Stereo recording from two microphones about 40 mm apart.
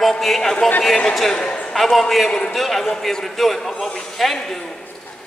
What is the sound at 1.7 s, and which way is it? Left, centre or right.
A man's voice, centre.